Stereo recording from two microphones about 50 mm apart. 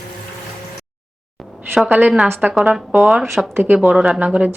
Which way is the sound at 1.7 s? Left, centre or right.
Centre.